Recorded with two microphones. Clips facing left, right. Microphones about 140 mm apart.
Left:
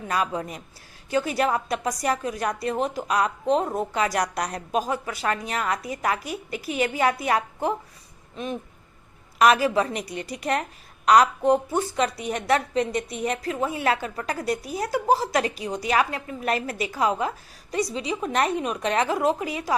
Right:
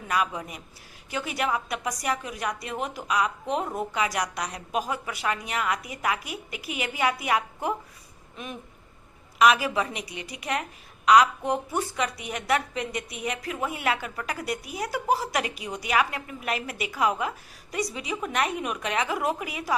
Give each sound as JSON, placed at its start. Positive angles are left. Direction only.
{"t": 0.1, "sound": "a woman's voice", "side_deg": 35}
{"t": 3.1, "sound": "speech", "side_deg": 45}
{"t": 3.4, "sound": "a woman's voice", "side_deg": 30}
{"t": 3.9, "sound": "a woman's voice", "side_deg": 40}
{"t": 9.4, "sound": "a woman's voice", "side_deg": 40}
{"t": 11.7, "sound": "a woman's voice", "side_deg": 30}